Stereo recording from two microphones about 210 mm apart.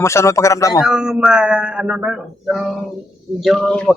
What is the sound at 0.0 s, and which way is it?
Speech, 15° left (ahead or behind).